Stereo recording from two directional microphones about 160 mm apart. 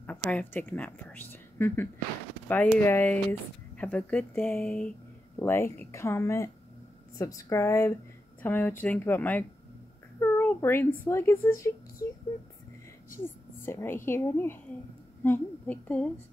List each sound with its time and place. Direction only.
0.3 s a woman's voice: 10° left (ahead or behind)
13.2 s speech: 15° left (ahead or behind)